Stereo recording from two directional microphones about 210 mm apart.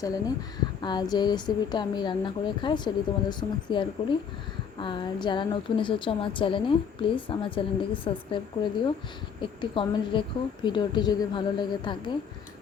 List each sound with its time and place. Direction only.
0.0 s a woman's voice: 15° left (ahead or behind)
9.4 s a woman's voice: 25° left (ahead or behind)